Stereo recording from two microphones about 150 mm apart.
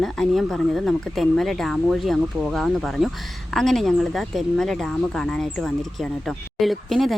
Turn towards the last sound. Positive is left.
turn(degrees=0)  # may be behind; listen again after turning